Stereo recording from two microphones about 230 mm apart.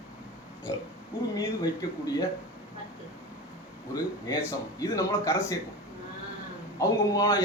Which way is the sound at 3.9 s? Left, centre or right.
Centre.